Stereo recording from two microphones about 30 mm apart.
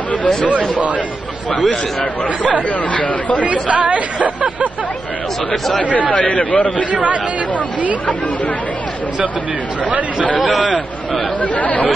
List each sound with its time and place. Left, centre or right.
0.5 s speech: right
1.6 s speech: left
2.9 s a man's voice: left
3.6 s speech: right
5.8 s a man's voice: left
6.9 s speech: right
9.8 s speech: right
11.4 s a man's voice: left